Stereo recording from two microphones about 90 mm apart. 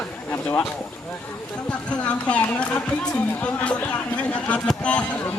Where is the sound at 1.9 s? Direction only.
15° left (ahead or behind).